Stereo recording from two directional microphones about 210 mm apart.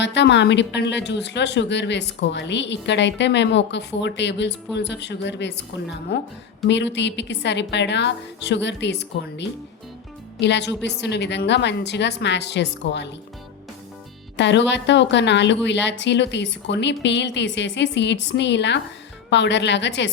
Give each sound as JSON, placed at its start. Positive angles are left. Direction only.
{"t": 0.0, "sound": "a woman's voice", "side_deg": 55}
{"t": 14.3, "sound": "a woman's voice", "side_deg": 55}